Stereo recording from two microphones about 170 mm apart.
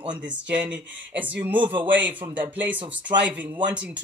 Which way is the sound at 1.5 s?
30° right (ahead or behind).